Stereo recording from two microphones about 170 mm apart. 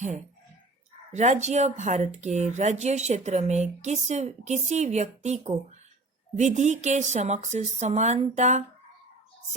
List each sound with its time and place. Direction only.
1.1 s speech: 45° right (ahead or behind)